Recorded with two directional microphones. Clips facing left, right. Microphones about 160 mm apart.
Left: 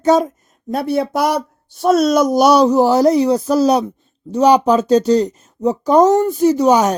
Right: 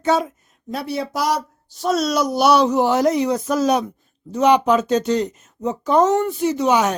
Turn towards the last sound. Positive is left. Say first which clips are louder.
# left 5 dB
turn(degrees=40)  # may be behind; listen again after turning